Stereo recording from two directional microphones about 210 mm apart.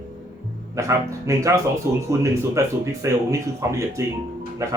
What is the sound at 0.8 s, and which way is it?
A man's voice, 15° right (ahead or behind).